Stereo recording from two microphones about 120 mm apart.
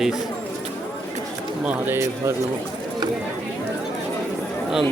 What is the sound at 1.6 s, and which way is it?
Speech, 20° right (ahead or behind).